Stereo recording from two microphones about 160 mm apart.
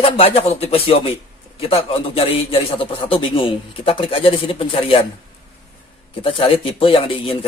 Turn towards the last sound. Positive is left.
turn(degrees=35)  # may be behind; listen again after turning